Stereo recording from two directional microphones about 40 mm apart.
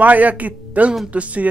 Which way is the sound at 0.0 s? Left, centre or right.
Right.